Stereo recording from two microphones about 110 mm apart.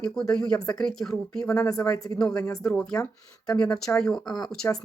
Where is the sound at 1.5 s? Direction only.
35° left (ahead or behind).